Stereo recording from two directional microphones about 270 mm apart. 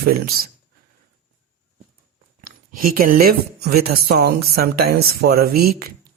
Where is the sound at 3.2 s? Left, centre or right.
Right.